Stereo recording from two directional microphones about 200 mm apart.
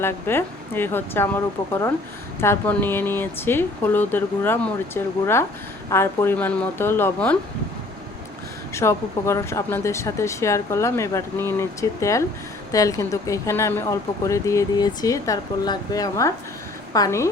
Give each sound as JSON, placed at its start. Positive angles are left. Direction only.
{"t": 0.0, "sound": "speech", "side_deg": 10}
{"t": 8.7, "sound": "speech", "side_deg": 15}